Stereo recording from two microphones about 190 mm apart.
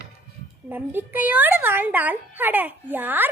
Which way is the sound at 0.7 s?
10° right (ahead or behind).